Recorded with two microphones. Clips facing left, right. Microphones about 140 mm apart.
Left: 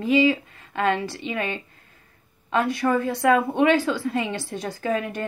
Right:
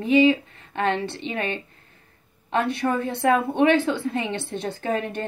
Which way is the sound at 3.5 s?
25° right (ahead or behind).